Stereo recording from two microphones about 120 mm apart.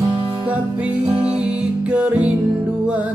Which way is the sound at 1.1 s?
10° right (ahead or behind).